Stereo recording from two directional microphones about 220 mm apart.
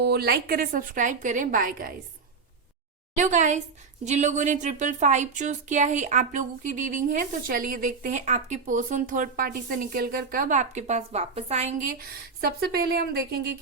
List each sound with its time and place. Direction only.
0.0 s speech: 45° right (ahead or behind)
3.2 s speech: 35° right (ahead or behind)